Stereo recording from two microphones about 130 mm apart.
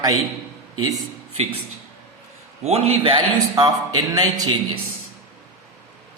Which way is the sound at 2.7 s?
55° right (ahead or behind).